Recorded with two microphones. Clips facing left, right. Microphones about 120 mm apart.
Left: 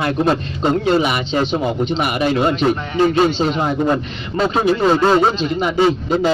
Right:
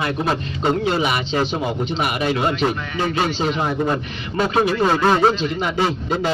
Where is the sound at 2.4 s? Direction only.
30° left (ahead or behind).